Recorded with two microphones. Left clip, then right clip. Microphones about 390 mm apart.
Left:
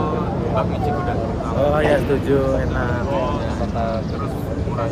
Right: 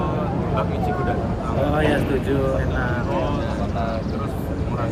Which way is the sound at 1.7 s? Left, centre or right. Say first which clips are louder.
Left 3 dB; centre.